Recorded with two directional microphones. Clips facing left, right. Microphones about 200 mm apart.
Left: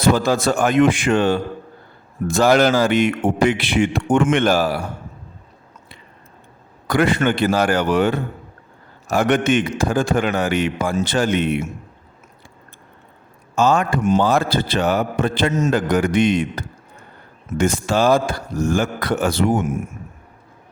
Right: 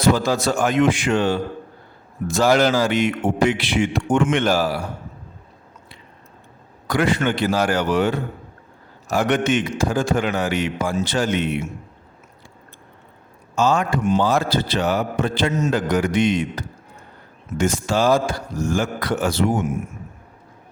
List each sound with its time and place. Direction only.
0.2 s a man's voice: 55° left (ahead or behind)
6.8 s a man's voice: 55° left (ahead or behind)
13.6 s a man's voice: 55° left (ahead or behind)